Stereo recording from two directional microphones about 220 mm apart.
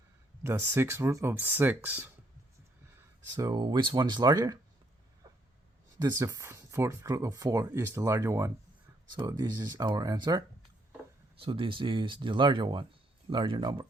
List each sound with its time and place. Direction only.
0.4 s speech: 10° right (ahead or behind)
3.3 s speech: 15° right (ahead or behind)
5.2 s a sound: 15° right (ahead or behind)
6.0 s speech: 15° right (ahead or behind)